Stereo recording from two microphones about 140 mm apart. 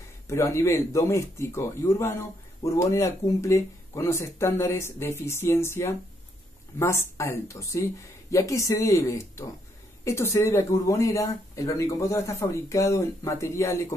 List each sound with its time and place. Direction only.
0.3 s speech: 20° left (ahead or behind)